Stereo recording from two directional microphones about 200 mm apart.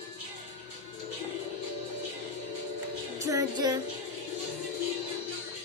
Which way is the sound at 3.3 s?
15° right (ahead or behind).